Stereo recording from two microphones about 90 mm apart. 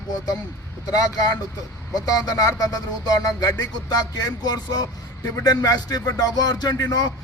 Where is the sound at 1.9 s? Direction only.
45° left (ahead or behind).